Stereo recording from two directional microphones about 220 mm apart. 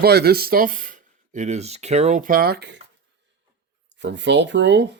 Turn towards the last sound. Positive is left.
turn(degrees=-55)  # may be behind; listen again after turning